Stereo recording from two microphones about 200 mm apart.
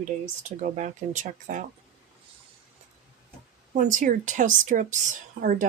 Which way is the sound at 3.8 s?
40° right (ahead or behind).